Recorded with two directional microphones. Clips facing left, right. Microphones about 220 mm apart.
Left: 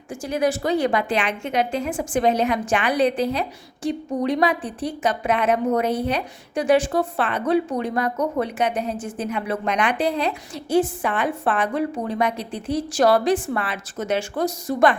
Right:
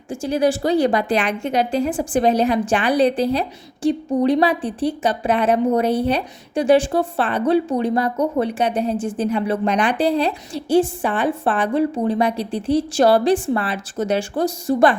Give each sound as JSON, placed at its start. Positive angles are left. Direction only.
{"t": 0.1, "sound": "a woman's voice", "side_deg": -30}